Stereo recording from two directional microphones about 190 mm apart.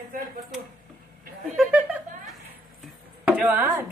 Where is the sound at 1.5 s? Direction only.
5° right (ahead or behind).